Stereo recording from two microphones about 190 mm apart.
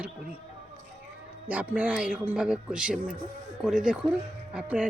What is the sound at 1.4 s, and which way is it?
A man's voice, 5° right (ahead or behind).